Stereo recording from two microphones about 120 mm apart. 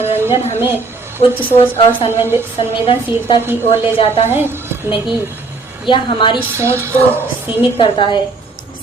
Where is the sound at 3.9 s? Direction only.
55° left (ahead or behind).